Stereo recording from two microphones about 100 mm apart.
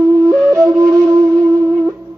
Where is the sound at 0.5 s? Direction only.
30° right (ahead or behind).